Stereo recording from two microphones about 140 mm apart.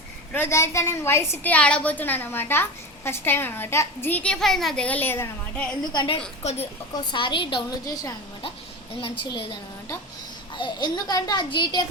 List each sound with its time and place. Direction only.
0.3 s a woman's voice: 20° left (ahead or behind)
5.9 s a woman's voice: 35° left (ahead or behind)
6.9 s a woman's voice: 35° left (ahead or behind)
9.0 s a woman's voice: 40° left (ahead or behind)